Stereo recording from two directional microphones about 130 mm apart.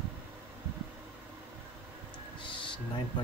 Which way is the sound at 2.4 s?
40° left (ahead or behind).